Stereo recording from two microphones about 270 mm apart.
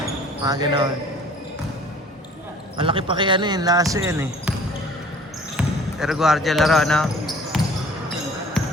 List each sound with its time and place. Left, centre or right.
0.4 s speech: centre
2.7 s speech: centre
5.5 s basketball bounce: centre